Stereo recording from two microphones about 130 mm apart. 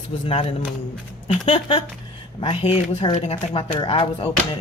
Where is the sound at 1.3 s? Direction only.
45° left (ahead or behind).